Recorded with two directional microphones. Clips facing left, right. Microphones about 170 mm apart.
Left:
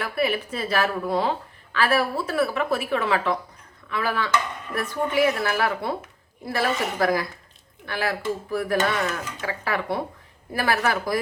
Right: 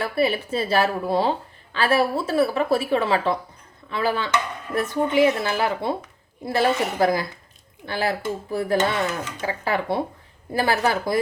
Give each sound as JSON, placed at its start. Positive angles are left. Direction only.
{"t": 0.0, "sound": "a woman's voice", "side_deg": -30}